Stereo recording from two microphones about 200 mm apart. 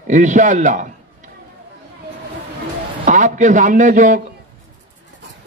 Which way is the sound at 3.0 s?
40° right (ahead or behind).